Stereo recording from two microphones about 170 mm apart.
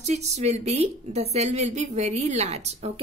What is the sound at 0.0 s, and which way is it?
A woman's voice, 40° right (ahead or behind).